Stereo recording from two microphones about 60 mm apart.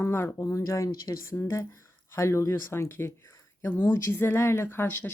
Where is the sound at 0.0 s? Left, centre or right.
Left.